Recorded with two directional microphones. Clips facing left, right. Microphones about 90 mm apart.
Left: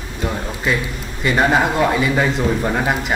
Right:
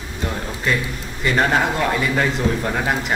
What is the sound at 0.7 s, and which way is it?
Speech, 5° left (ahead or behind).